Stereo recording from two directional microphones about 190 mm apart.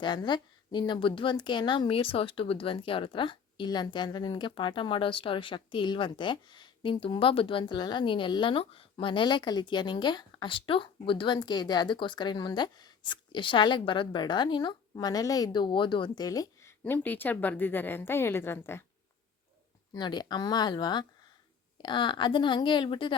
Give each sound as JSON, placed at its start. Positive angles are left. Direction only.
{"t": 0.0, "sound": "a woman's voice", "side_deg": 25}
{"t": 19.9, "sound": "a woman's voice", "side_deg": 20}